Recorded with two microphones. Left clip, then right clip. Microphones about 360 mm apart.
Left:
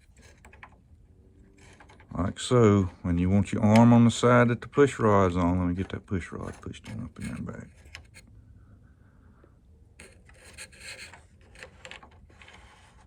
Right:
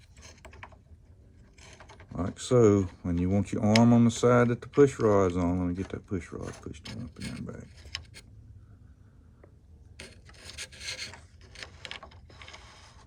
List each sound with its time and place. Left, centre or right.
0.2 s mechanisms: centre
2.1 s speech: left
10.0 s rub: centre